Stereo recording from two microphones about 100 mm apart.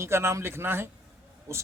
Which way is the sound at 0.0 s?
25° right (ahead or behind).